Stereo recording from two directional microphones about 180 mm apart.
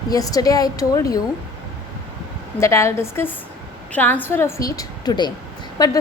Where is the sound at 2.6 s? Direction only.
15° left (ahead or behind).